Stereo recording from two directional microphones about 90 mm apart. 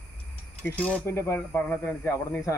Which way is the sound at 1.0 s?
35° left (ahead or behind).